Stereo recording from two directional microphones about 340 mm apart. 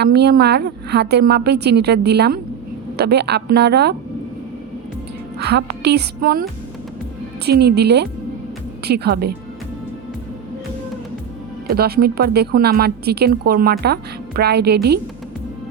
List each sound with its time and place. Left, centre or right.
0.0 s a woman's voice: right
5.4 s a woman's voice: right
7.4 s a woman's voice: right
11.7 s a woman's voice: right